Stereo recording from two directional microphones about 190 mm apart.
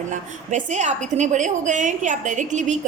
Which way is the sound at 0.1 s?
40° right (ahead or behind).